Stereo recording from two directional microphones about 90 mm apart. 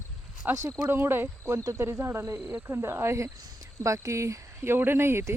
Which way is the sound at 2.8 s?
30° right (ahead or behind).